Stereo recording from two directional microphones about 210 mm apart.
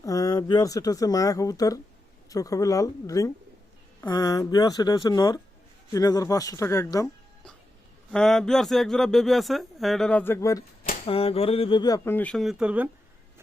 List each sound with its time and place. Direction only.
0.0 s speech: 15° left (ahead or behind)
8.1 s speech: 5° left (ahead or behind)
11.0 s speech: 25° left (ahead or behind); by 12.9 s 5° right (ahead or behind)